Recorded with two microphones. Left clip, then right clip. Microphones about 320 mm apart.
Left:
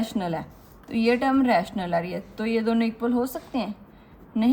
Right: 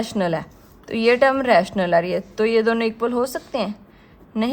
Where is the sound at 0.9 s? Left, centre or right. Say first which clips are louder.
Right 7 dB; right.